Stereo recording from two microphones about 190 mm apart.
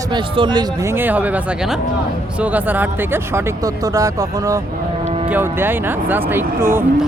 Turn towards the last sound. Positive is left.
turn(degrees=-10)  # may be behind; listen again after turning